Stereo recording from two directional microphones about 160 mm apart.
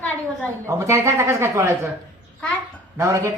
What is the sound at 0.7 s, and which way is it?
A man's voice, 20° right (ahead or behind).